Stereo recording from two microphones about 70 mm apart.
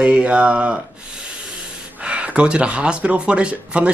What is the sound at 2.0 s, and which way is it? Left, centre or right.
Speech, centre.